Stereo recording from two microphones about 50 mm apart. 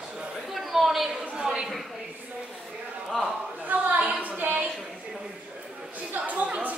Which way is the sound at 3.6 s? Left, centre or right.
Right.